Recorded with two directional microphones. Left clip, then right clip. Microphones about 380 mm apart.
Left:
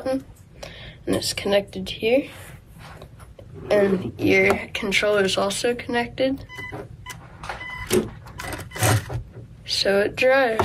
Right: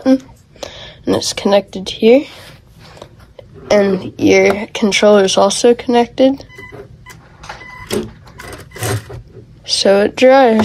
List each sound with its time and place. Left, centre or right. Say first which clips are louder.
0.0 s speech: right 11 dB; centre
3.6 s speech: right 7 dB; centre
9.7 s speech: right 9 dB; centre